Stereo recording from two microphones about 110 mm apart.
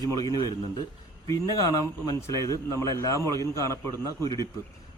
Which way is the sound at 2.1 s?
30° left (ahead or behind).